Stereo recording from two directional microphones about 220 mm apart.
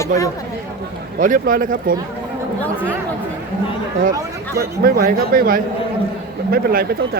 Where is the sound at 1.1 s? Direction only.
35° right (ahead or behind).